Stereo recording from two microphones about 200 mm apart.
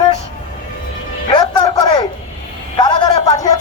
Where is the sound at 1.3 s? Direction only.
25° left (ahead or behind).